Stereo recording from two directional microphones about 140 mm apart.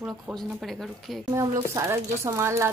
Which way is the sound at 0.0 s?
Centre (ahead or behind).